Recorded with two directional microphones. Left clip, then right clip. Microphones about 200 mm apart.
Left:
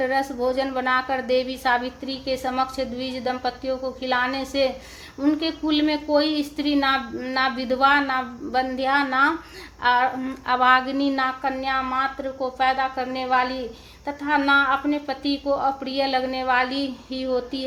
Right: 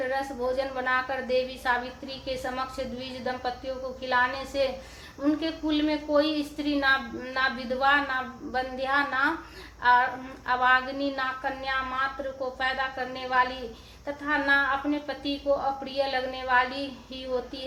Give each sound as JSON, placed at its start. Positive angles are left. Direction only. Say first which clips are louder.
{"t": 0.1, "sound": "a woman's voice", "louder": "left 6 dB", "side_deg": 45}